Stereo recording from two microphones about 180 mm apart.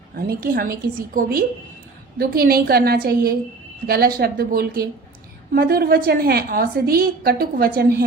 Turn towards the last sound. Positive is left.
turn(degrees=-55)  # may be behind; listen again after turning